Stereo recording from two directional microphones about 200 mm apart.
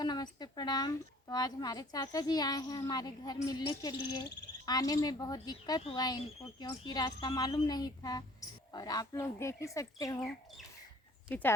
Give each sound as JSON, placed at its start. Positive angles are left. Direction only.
{"t": 0.0, "sound": "speech", "side_deg": 20}
{"t": 11.3, "sound": "speech", "side_deg": 10}